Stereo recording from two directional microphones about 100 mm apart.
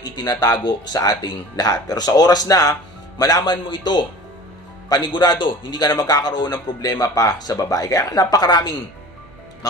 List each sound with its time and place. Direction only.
0.0 s a man's voice: 40° left (ahead or behind)